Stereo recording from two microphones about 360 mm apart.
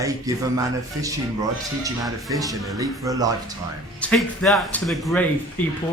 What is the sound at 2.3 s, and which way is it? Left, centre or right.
Speech, centre.